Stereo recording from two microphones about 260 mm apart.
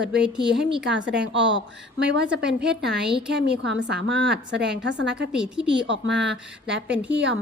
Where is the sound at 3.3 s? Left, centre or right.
Right.